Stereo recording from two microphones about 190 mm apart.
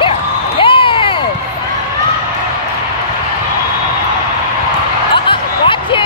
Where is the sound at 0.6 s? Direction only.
25° left (ahead or behind).